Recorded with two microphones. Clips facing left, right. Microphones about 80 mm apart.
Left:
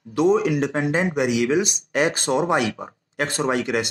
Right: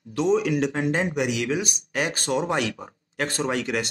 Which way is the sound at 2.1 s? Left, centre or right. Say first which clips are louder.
Left 4 dB; left.